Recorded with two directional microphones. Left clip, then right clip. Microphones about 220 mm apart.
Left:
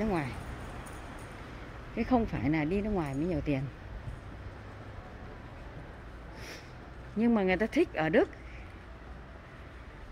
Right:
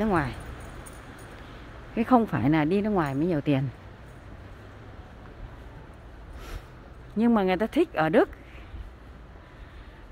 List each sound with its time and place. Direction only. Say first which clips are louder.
0.0 s speech: right 7 dB; 25° right (ahead or behind)
2.0 s speech: right 7 dB; 30° right (ahead or behind)
7.2 s speech: right 4 dB; 20° right (ahead or behind)